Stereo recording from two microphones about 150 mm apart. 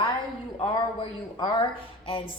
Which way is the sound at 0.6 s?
35° left (ahead or behind).